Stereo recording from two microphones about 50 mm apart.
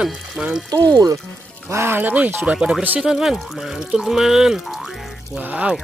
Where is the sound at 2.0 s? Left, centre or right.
Right.